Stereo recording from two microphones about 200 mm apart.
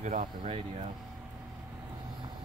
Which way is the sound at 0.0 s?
40° right (ahead or behind).